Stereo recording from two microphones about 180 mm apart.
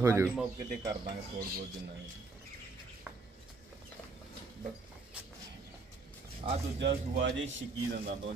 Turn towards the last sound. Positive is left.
turn(degrees=-85)